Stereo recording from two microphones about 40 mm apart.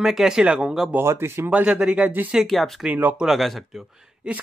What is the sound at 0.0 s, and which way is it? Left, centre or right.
Speech, centre.